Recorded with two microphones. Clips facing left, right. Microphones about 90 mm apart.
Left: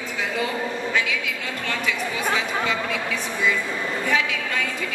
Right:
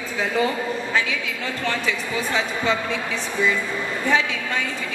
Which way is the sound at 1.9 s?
30° right (ahead or behind).